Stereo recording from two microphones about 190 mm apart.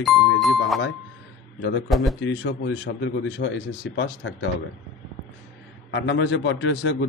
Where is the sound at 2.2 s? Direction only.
80° left.